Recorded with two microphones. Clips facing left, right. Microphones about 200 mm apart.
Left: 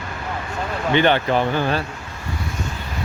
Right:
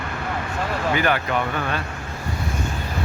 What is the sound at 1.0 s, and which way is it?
Speech, 30° left (ahead or behind).